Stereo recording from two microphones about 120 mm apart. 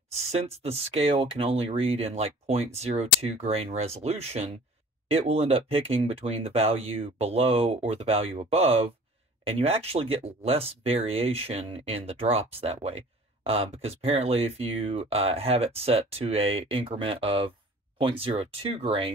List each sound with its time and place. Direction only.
0.3 s speech: 60° right (ahead or behind)